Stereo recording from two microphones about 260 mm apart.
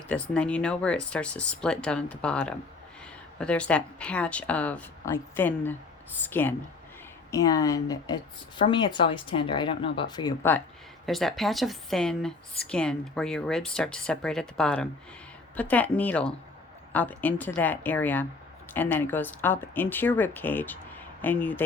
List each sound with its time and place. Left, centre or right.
0.1 s a woman's voice: centre
11.0 s a woman's voice: centre